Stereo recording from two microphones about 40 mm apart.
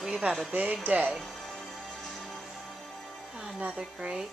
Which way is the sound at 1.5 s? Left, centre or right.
Centre.